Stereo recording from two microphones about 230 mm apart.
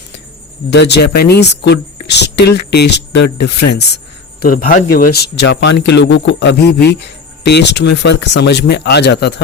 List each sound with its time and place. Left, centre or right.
0.7 s a man's voice: left